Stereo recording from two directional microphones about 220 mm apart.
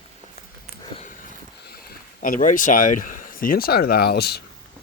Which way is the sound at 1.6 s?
45° left (ahead or behind).